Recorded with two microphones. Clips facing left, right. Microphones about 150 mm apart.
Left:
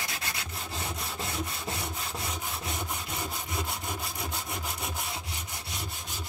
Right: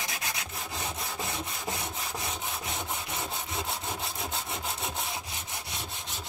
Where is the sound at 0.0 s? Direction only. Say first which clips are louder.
Right 1 dB; 20° right (ahead or behind).